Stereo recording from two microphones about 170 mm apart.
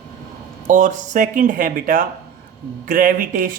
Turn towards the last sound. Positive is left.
turn(degrees=-55)  # may be behind; listen again after turning